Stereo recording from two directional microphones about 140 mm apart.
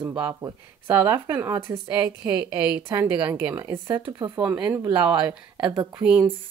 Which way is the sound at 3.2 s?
15° right (ahead or behind).